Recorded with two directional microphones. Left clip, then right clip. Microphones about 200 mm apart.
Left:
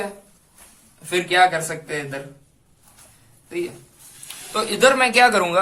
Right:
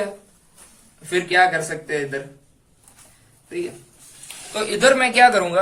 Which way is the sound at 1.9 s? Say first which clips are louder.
Right 6 dB; 35° left (ahead or behind).